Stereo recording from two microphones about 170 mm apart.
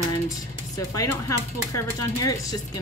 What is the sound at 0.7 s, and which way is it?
Speech, 20° left (ahead or behind).